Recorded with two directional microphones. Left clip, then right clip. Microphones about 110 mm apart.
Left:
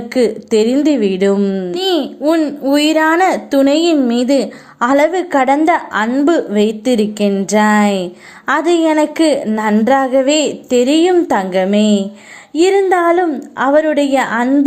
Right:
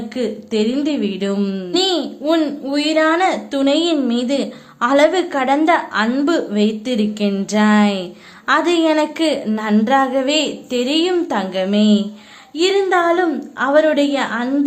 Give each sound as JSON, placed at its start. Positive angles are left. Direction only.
{"t": 0.1, "sound": "a woman's voice", "side_deg": 65}
{"t": 0.9, "sound": "a woman's voice", "side_deg": 55}
{"t": 1.4, "sound": "a woman's voice", "side_deg": 35}
{"t": 1.7, "sound": "a woman's voice", "side_deg": 55}
{"t": 2.6, "sound": "a woman's voice", "side_deg": 90}
{"t": 12.5, "sound": "a woman's voice", "side_deg": 60}